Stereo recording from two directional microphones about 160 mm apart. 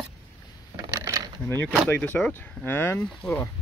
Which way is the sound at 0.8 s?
20° right (ahead or behind).